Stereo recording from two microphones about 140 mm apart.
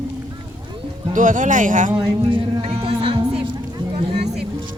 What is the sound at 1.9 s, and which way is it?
A capella, 35° right (ahead or behind).